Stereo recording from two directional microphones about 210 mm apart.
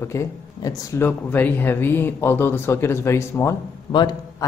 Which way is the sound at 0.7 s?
10° left (ahead or behind).